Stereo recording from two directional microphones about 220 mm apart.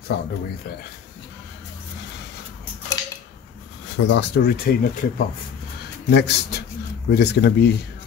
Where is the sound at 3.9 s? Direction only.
55° left (ahead or behind).